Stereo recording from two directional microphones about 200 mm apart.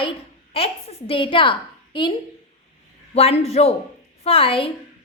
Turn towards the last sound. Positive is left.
turn(degrees=25)  # may be behind; listen again after turning